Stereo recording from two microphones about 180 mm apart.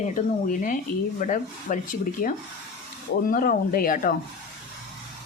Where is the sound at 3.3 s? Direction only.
55° left (ahead or behind).